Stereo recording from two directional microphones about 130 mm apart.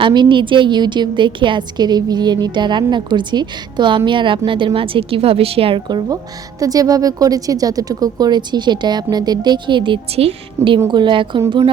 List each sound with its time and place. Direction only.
0.0 s a woman's voice: 35° right (ahead or behind)